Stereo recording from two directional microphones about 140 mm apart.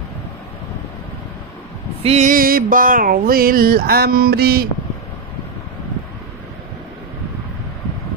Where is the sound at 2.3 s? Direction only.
90° right.